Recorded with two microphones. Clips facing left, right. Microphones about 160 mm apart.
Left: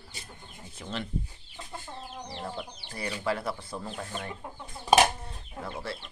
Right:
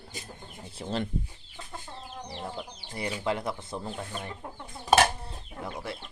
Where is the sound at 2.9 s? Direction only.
20° right (ahead or behind).